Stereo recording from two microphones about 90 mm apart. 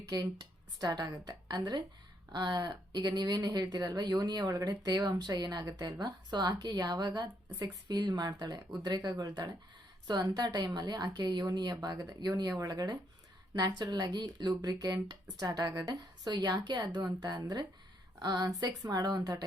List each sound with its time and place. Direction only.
0.1 s a woman's voice: 45° right (ahead or behind)
16.3 s speech: 55° right (ahead or behind)